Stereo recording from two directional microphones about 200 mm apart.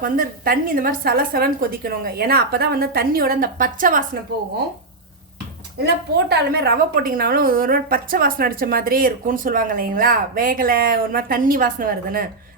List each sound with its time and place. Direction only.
0.0 s a woman's voice: 45° right (ahead or behind)
5.8 s a woman's voice: 55° right (ahead or behind)